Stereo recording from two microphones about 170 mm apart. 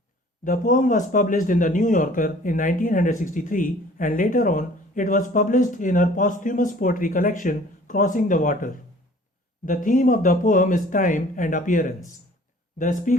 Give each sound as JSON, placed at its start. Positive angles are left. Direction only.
{"t": 0.4, "sound": "speech", "side_deg": 50}